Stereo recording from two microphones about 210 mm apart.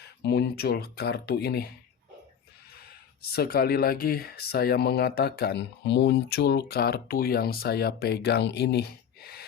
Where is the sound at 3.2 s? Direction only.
50° left (ahead or behind).